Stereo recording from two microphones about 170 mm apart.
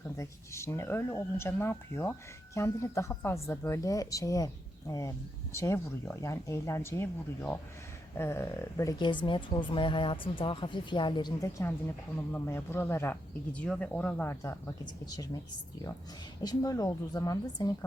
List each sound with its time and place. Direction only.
0.2 s speech: 15° left (ahead or behind)
16.4 s speech: 20° left (ahead or behind)